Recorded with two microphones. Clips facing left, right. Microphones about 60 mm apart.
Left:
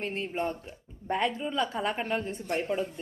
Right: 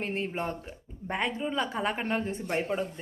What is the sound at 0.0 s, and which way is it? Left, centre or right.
Speech, right.